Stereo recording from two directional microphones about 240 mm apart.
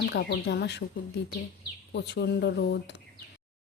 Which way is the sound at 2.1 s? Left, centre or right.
Left.